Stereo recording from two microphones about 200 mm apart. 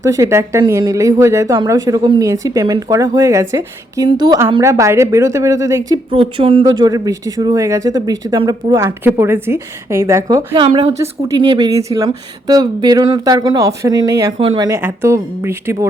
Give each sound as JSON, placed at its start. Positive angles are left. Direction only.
{"t": 0.0, "sound": "a woman's voice", "side_deg": -15}
{"t": 6.1, "sound": "a woman's voice", "side_deg": -30}